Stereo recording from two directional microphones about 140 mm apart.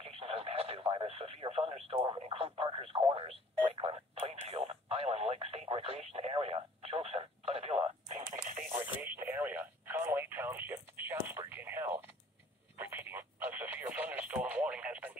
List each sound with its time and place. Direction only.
0.0 s radio: 45° right (ahead or behind)
3.0 s alarm clock: 30° right (ahead or behind)
3.3 s radio: 40° right (ahead or behind)
8.2 s radio: 70° right (ahead or behind)
9.0 s radio: 15° right (ahead or behind)